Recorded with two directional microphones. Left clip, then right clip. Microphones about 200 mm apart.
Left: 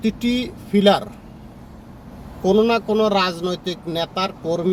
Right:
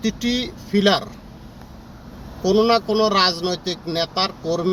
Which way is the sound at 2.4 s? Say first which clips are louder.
Even; 10° left (ahead or behind).